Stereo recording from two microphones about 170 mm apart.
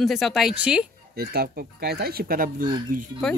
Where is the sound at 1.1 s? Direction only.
65° right (ahead or behind).